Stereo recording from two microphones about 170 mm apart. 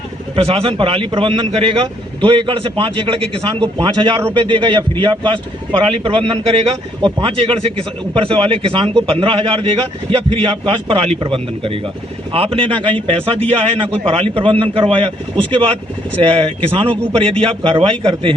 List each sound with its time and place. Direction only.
0.3 s a man's voice: 35° right (ahead or behind)
16.2 s a man's voice: 35° right (ahead or behind)